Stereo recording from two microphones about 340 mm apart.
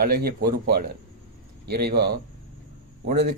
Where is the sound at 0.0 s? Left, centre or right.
Right.